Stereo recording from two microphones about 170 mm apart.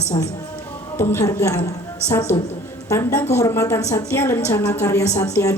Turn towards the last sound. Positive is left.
turn(degrees=20)  # may be behind; listen again after turning